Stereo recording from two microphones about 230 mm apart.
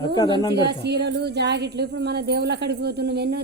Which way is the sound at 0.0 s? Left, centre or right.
Centre.